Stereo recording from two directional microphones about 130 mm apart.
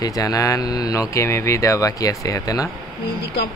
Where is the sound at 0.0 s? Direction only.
30° left (ahead or behind).